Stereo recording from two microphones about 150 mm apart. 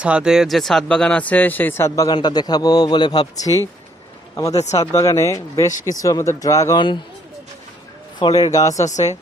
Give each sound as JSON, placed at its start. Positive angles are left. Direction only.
{"t": 0.0, "sound": "a man's voice", "side_deg": -5}
{"t": 4.9, "sound": "a man's voice", "side_deg": 20}
{"t": 8.2, "sound": "a man's voice", "side_deg": 25}
{"t": 8.8, "sound": "speech", "side_deg": 50}